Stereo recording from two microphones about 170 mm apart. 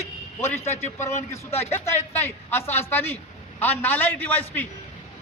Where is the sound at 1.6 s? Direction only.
15° left (ahead or behind).